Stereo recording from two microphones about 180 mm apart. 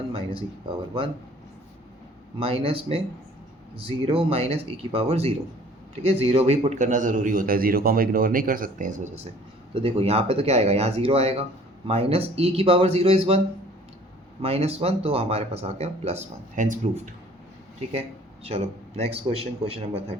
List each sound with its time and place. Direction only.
0.1 s speech: 30° right (ahead or behind)
2.4 s a man's voice: 30° right (ahead or behind); by 8.9 s 50° right (ahead or behind)
9.7 s speech: 35° right (ahead or behind)
14.4 s speech: 35° right (ahead or behind)
18.4 s speech: 35° right (ahead or behind)